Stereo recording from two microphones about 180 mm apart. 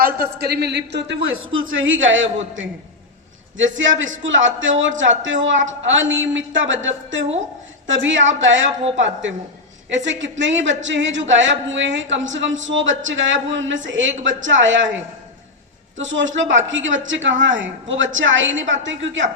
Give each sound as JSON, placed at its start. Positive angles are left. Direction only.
{"t": 0.0, "sound": "a man's voice", "side_deg": -60}
{"t": 9.9, "sound": "a man's voice", "side_deg": -90}
{"t": 16.0, "sound": "a man's voice", "side_deg": -90}